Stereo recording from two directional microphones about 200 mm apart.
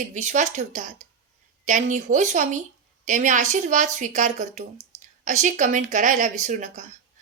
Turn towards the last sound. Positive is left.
turn(degrees=-40)  # may be behind; listen again after turning